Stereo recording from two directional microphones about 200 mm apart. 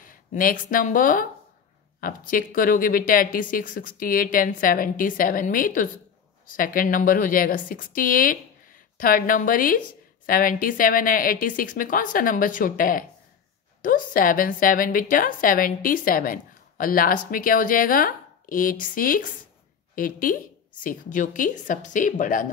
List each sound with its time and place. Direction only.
0.0 s a woman's voice: 45° left (ahead or behind)